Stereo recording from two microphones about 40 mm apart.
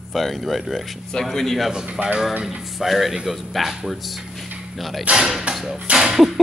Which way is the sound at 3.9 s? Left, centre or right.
Centre.